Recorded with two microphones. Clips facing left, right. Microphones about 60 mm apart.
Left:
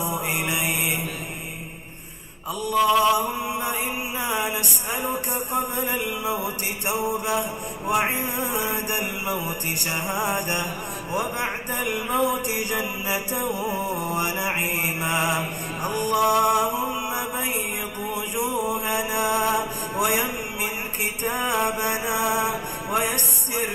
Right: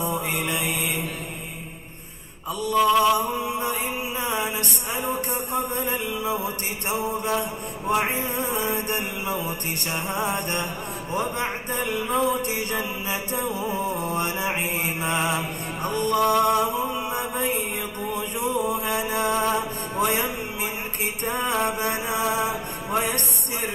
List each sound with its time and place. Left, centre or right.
0.4 s mantra: centre
2.7 s music: centre
5.5 s mantra: centre
6.2 s music: left
7.1 s music: centre
12.5 s music: centre
13.5 s music: left
13.8 s music: right
14.2 s mantra: centre
15.0 s music: centre
21.3 s music: centre